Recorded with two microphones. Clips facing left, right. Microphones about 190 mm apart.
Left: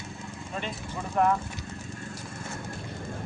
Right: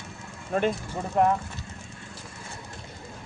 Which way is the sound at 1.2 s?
20° right (ahead or behind).